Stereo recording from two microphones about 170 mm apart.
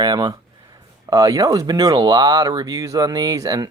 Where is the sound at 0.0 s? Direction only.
25° right (ahead or behind).